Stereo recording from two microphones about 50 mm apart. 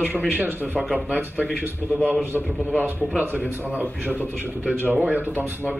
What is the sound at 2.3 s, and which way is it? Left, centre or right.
Speech, left.